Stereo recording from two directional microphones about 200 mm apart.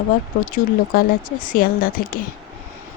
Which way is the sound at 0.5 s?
40° left (ahead or behind).